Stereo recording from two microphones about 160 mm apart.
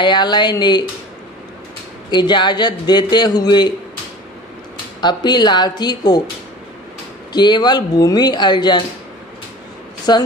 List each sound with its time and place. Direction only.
0.0 s a man's voice: 25° left (ahead or behind)
2.0 s a man's voice: 25° left (ahead or behind)
5.0 s a man's voice: 25° left (ahead or behind)
7.3 s a man's voice: 25° left (ahead or behind)
10.1 s a man's voice: 25° left (ahead or behind)